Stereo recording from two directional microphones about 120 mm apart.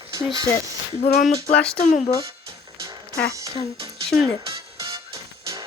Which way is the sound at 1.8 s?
75° left (ahead or behind).